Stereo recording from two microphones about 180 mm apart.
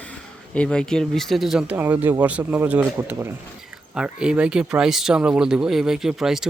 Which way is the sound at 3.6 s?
5° right (ahead or behind).